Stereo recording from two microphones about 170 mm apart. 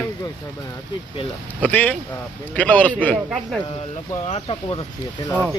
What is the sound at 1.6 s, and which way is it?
Speech, 10° left (ahead or behind).